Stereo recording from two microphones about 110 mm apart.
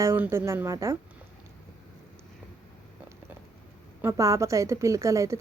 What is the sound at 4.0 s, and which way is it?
A woman's voice, 25° right (ahead or behind).